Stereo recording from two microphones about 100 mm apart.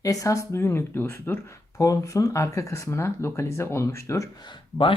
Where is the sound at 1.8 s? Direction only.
35° left (ahead or behind).